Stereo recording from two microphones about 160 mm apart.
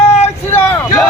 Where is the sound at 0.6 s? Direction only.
15° left (ahead or behind).